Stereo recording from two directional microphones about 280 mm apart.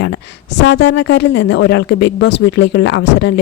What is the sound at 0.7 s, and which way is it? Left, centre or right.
Speech, left.